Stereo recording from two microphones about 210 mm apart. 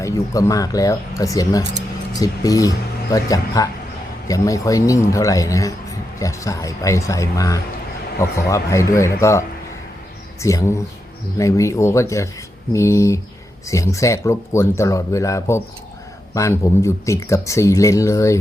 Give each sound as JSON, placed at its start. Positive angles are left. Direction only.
{"t": 0.0, "sound": "speech", "side_deg": 15}
{"t": 10.4, "sound": "speech", "side_deg": 15}